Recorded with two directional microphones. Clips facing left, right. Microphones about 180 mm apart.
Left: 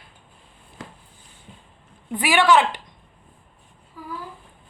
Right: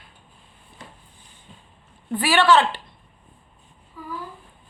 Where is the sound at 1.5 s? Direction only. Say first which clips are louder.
Left 2 dB; 15° left (ahead or behind).